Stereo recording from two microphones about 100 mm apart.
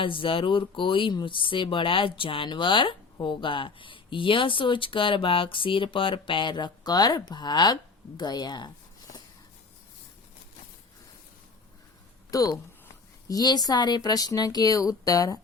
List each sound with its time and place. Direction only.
0.0 s speech: 60° left (ahead or behind); by 9.2 s 45° left (ahead or behind)
12.3 s speech: 40° left (ahead or behind)